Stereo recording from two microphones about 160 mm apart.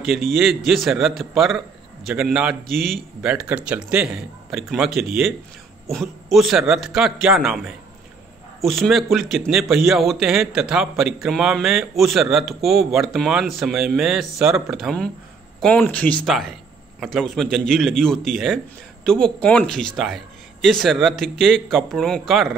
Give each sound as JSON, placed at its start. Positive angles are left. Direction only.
{"t": 0.0, "sound": "speech", "side_deg": 0}
{"t": 6.3, "sound": "speech", "side_deg": 0}